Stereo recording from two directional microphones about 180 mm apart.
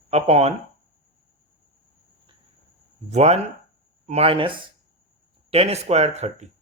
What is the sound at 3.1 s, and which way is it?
Speech, 35° right (ahead or behind).